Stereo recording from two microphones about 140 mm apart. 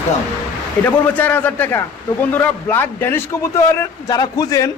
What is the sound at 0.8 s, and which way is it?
A man's voice, 10° left (ahead or behind).